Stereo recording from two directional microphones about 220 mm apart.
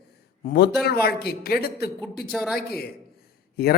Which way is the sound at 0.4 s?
45° left (ahead or behind).